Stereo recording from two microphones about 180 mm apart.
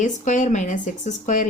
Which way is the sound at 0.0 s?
45° left (ahead or behind).